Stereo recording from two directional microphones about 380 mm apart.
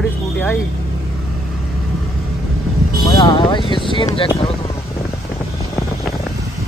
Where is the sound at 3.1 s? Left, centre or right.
Centre.